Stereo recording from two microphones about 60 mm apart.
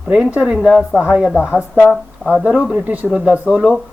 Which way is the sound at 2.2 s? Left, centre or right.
Right.